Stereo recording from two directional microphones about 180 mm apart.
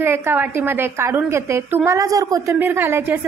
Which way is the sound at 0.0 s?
10° right (ahead or behind).